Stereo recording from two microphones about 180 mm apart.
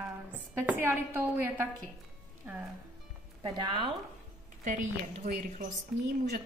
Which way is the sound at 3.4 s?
25° right (ahead or behind).